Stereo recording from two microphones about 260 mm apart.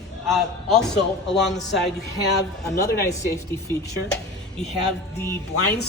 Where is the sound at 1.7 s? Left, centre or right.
Left.